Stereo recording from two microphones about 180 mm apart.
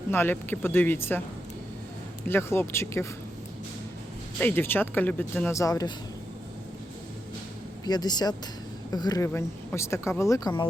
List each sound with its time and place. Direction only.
0.1 s speech: 10° left (ahead or behind)
2.2 s speech: 15° left (ahead or behind)
4.4 s speech: 10° left (ahead or behind)
7.9 s speech: 25° left (ahead or behind)